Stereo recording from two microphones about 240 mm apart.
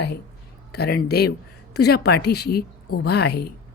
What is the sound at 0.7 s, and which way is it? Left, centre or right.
A woman's voice, left.